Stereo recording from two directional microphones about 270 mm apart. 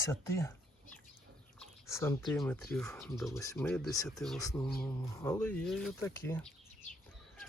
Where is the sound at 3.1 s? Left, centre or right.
Centre.